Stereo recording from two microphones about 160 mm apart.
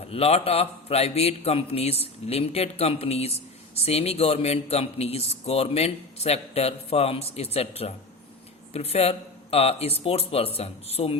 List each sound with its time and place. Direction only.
0.1 s a man's voice: 40° left (ahead or behind)